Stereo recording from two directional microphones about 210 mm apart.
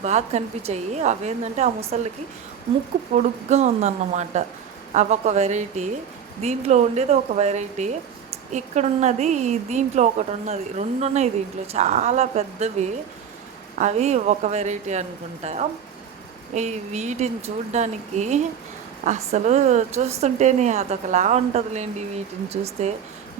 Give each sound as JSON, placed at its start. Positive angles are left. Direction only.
{"t": 0.0, "sound": "a woman's voice", "side_deg": -30}
{"t": 3.2, "sound": "a woman's voice", "side_deg": -35}